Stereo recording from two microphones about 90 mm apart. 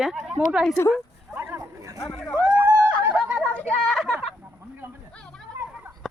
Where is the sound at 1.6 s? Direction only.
40° right (ahead or behind).